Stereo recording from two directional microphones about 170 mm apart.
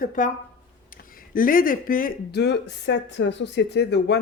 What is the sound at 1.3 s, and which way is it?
Speech, 55° left (ahead or behind).